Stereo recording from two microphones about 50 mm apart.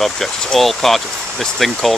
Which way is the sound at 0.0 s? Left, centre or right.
Centre.